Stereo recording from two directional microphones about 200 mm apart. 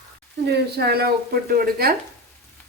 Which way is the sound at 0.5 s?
50° right (ahead or behind).